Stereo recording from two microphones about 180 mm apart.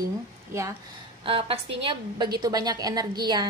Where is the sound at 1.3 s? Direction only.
30° right (ahead or behind).